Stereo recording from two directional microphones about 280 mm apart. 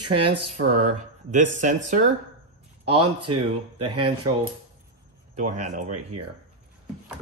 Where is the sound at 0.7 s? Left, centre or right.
Right.